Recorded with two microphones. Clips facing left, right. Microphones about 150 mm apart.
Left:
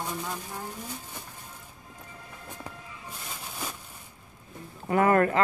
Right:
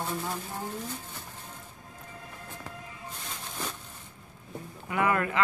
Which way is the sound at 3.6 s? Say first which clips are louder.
Even; 10° left (ahead or behind).